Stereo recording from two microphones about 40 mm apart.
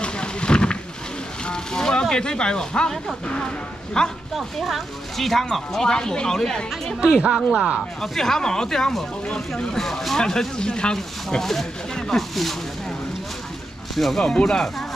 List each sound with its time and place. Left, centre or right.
0.0 s wild animals: left
1.4 s a sound: centre
3.3 s a man's voice: left
4.4 s speech: centre
7.1 s speech: centre
8.0 s a man's voice: centre
11.2 s speech: centre
13.9 s speech: centre
14.2 s speech: centre